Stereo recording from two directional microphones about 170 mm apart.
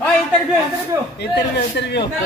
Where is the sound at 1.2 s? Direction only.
80° left.